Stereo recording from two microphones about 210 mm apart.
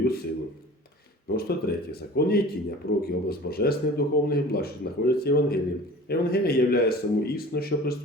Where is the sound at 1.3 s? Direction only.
50° left (ahead or behind).